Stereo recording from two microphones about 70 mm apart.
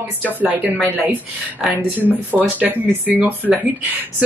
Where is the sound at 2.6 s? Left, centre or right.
Right.